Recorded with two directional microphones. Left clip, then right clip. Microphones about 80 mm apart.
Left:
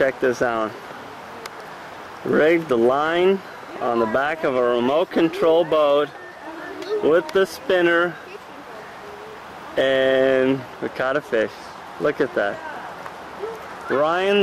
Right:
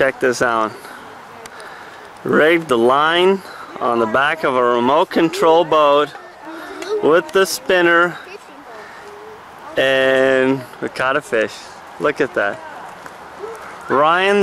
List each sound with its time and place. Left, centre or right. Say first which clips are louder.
0.0 s speech: right 4 dB; right
2.3 s speech: right 4 dB; right
9.8 s speech: right 4 dB; right
13.8 s speech: right 6 dB; centre